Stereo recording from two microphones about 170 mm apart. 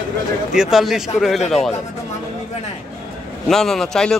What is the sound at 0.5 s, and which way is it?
Speech, 5° right (ahead or behind).